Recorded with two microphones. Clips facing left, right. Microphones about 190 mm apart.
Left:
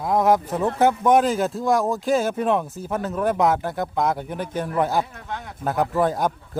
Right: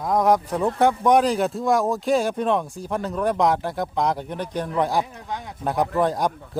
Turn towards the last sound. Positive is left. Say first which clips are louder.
# even
turn(degrees=5)  # may be behind; listen again after turning